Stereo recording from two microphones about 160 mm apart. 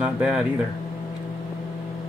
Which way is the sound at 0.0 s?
5° right (ahead or behind).